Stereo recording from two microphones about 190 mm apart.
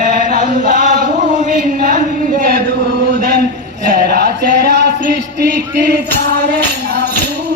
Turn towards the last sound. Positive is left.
turn(degrees=-60)  # may be behind; listen again after turning